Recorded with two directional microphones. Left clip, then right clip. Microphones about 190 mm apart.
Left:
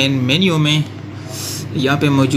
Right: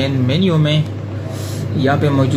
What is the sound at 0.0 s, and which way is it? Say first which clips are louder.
Speech: left 3 dB; 60° left (ahead or behind).